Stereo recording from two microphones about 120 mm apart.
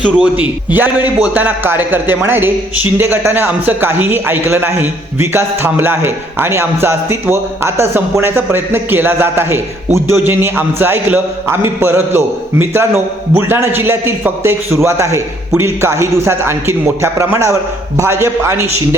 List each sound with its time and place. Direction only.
0.0 s a man's voice: 10° right (ahead or behind)